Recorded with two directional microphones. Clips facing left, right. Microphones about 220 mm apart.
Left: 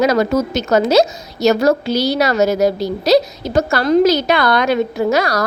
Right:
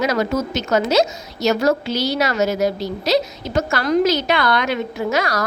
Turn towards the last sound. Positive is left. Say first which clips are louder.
# left 5 dB
turn(degrees=35)  # may be behind; listen again after turning